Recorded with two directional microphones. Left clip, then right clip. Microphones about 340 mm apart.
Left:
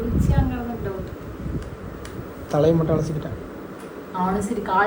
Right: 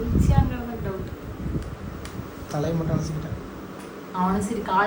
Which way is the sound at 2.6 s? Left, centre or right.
Centre.